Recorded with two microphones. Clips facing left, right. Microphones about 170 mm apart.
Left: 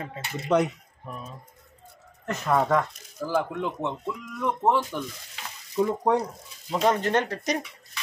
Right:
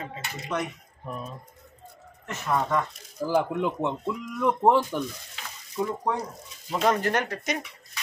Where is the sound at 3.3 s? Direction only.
15° right (ahead or behind).